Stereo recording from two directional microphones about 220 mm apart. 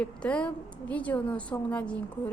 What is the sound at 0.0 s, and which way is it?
A woman's voice, 5° left (ahead or behind).